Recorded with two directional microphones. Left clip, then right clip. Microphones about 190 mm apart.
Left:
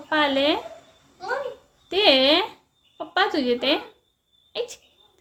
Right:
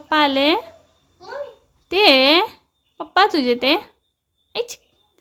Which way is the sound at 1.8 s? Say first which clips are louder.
Right 5 dB; 40° right (ahead or behind).